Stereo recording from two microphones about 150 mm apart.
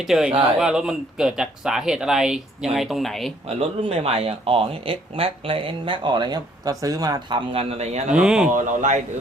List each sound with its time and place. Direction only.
0.0 s speech: 5° right (ahead or behind)
3.5 s speech: 45° right (ahead or behind)
8.1 s speech: 5° right (ahead or behind)
8.5 s a man's voice: 55° right (ahead or behind)